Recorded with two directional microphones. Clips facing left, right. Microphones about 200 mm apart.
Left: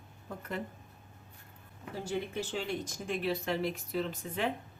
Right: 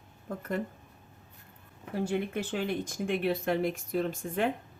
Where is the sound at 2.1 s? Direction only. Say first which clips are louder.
Right 2 dB; 60° right (ahead or behind).